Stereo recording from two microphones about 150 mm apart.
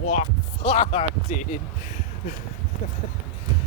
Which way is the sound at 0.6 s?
45° left (ahead or behind).